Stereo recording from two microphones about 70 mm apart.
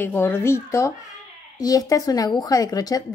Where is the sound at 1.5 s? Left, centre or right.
Left.